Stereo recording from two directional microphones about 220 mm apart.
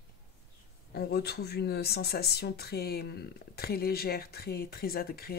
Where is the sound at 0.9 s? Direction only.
45° left (ahead or behind).